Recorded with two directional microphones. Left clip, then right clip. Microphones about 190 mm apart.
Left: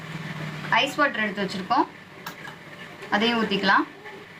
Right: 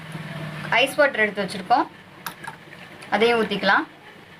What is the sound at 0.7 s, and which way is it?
A woman's voice, 25° right (ahead or behind).